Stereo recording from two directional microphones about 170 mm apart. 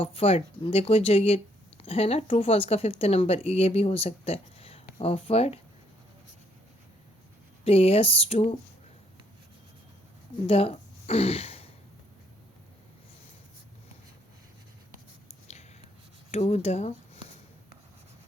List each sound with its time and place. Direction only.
0.0 s speech: 35° left (ahead or behind)
7.6 s speech: 35° left (ahead or behind)
10.4 s speech: 35° left (ahead or behind)
16.3 s speech: 40° left (ahead or behind)